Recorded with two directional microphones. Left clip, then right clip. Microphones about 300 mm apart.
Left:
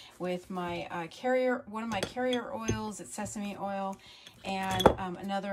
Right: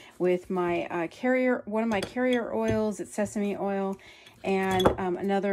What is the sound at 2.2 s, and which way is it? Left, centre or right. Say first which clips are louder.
Speech: right 7 dB; centre.